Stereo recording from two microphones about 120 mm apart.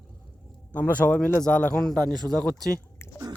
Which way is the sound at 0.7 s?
10° left (ahead or behind).